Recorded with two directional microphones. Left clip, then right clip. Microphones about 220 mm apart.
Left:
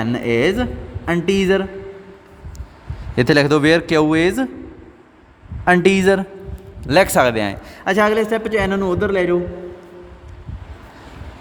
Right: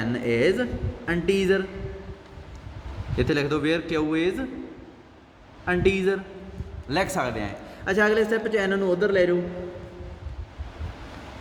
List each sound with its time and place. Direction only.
0.0 s a man's voice: 50° left (ahead or behind)
3.2 s a man's voice: 55° left (ahead or behind)
5.6 s a man's voice: 55° left (ahead or behind)
6.8 s a man's voice: 40° left (ahead or behind)